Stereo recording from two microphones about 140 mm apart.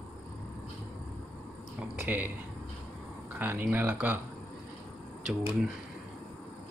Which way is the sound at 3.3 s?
15° right (ahead or behind).